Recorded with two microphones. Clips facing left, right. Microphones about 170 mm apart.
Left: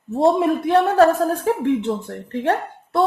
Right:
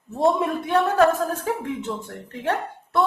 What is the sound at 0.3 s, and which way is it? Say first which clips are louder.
A woman's voice: left 4 dB; 30° left (ahead or behind).